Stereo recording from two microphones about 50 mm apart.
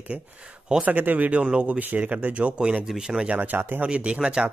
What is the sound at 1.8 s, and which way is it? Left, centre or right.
Speech, right.